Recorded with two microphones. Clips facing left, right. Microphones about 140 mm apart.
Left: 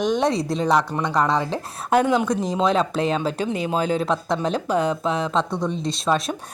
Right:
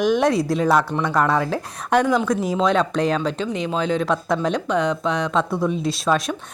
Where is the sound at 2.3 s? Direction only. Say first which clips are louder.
Right 1 dB; 5° right (ahead or behind).